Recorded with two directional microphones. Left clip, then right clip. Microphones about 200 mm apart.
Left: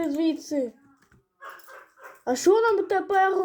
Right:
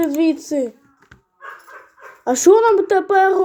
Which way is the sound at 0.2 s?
35° right (ahead or behind).